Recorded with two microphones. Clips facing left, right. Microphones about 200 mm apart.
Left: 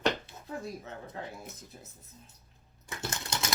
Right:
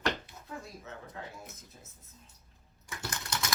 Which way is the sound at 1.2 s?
35° left (ahead or behind).